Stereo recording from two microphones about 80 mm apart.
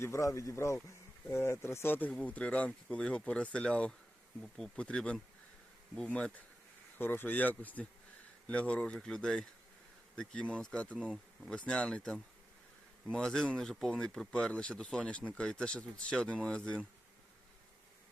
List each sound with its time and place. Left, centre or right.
0.0 s speech: left
2.0 s speech: centre
7.0 s speech: left; by 10.9 s centre
10.9 s speech: centre
11.4 s speech: centre